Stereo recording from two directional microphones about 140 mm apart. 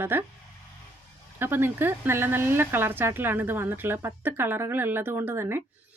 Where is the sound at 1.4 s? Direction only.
15° right (ahead or behind).